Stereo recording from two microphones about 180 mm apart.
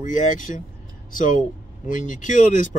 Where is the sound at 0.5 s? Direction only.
40° left (ahead or behind).